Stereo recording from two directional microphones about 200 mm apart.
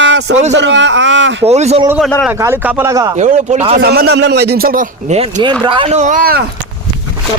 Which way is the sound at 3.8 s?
50° right (ahead or behind).